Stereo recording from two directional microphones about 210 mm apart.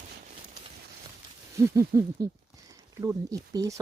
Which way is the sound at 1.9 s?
15° right (ahead or behind).